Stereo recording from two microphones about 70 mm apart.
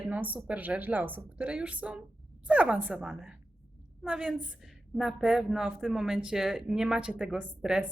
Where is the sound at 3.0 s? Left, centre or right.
Centre.